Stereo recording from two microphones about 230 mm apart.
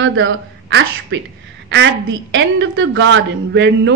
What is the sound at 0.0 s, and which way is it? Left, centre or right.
A woman's voice, right.